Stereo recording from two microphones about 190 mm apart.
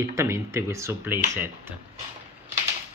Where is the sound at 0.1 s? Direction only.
15° right (ahead or behind).